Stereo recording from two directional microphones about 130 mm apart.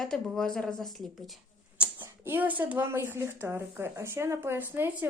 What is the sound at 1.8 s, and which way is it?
Speech, 15° right (ahead or behind).